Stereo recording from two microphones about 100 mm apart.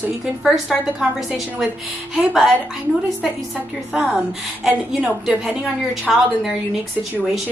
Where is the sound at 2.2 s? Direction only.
5° right (ahead or behind).